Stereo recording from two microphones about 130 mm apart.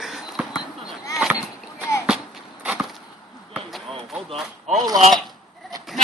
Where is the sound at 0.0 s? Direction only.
Centre (ahead or behind).